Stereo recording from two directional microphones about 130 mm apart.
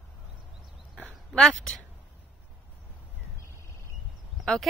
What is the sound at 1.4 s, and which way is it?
Speech, 5° left (ahead or behind).